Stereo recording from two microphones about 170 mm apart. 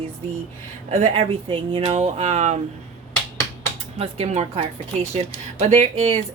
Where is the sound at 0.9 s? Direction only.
45° right (ahead or behind).